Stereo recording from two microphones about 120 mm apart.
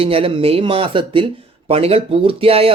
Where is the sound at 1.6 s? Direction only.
55° right (ahead or behind).